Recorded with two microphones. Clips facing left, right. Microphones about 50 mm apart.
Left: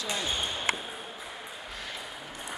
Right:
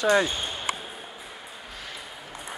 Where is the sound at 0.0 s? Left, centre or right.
Right.